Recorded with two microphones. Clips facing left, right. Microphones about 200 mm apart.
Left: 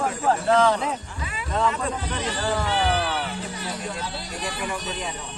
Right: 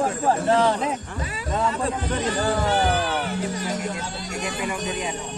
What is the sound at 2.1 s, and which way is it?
Speech, 50° right (ahead or behind).